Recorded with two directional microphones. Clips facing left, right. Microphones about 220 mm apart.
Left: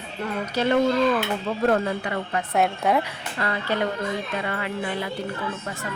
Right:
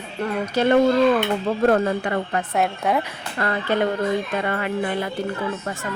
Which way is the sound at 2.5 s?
Centre (ahead or behind).